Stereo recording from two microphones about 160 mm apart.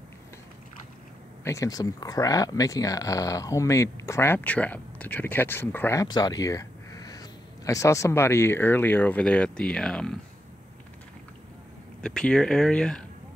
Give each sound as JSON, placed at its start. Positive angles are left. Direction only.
{"t": 1.4, "sound": "speech", "side_deg": 20}
{"t": 12.0, "sound": "speech", "side_deg": 5}